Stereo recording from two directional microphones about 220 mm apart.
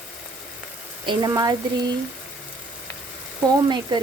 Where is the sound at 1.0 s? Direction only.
20° right (ahead or behind).